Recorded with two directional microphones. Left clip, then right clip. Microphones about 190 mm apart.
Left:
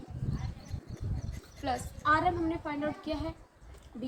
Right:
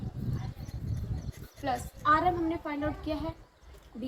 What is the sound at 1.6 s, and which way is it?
Speech, 10° left (ahead or behind).